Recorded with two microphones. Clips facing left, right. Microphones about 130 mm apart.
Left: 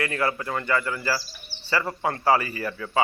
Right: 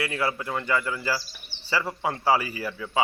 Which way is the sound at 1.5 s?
5° left (ahead or behind).